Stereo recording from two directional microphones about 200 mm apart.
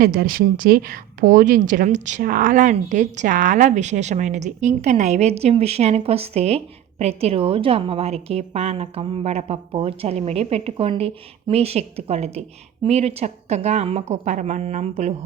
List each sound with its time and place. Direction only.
0.0 s a woman's voice: 45° right (ahead or behind)